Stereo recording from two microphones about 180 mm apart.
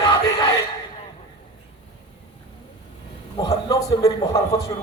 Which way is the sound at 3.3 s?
20° left (ahead or behind).